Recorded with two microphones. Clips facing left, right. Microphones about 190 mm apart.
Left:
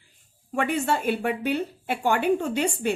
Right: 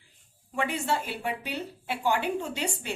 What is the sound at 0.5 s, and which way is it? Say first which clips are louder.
A woman's voice: left 4 dB; 55° left (ahead or behind).